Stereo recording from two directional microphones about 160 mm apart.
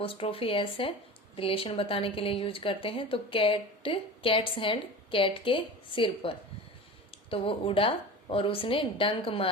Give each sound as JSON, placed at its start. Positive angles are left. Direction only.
{"t": 0.0, "sound": "a woman's voice", "side_deg": 35}